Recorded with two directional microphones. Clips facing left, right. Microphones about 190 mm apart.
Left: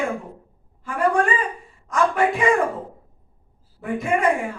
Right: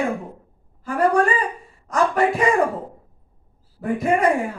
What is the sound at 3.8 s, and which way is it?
Speech, 40° right (ahead or behind).